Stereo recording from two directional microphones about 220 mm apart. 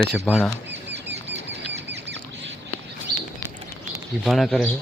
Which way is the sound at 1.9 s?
55° right (ahead or behind).